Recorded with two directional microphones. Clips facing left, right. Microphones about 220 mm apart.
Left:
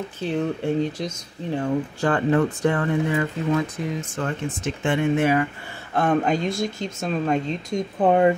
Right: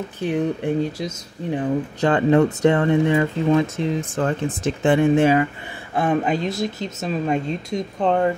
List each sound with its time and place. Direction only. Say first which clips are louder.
0.2 s speech: right 3 dB; 15° right (ahead or behind)
5.9 s speech: even; 5° right (ahead or behind)
8.0 s speech: left 2 dB; 15° left (ahead or behind)